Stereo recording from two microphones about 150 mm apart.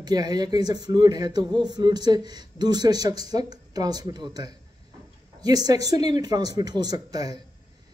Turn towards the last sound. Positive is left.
turn(degrees=-25)  # may be behind; listen again after turning